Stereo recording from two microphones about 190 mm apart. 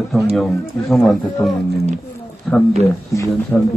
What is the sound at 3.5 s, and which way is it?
Speech, 10° left (ahead or behind).